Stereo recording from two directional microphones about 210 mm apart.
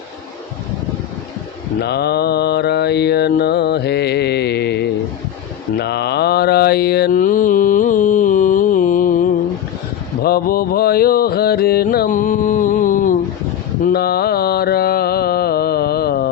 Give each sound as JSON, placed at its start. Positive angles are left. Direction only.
{"t": 1.8, "sound": "mantra", "side_deg": 50}